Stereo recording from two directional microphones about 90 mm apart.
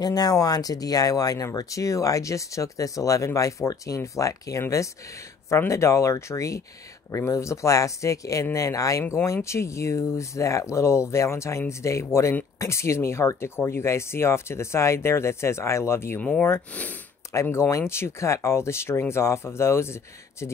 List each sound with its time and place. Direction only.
0.0 s speech: 45° left (ahead or behind); by 16.2 s 30° left (ahead or behind)
16.2 s speech: 15° left (ahead or behind)
17.3 s speech: 30° left (ahead or behind)